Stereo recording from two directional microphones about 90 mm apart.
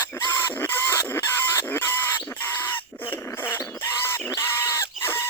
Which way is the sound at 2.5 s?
20° left (ahead or behind).